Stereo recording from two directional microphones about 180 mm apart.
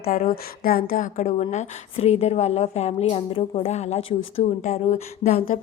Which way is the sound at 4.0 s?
90° left.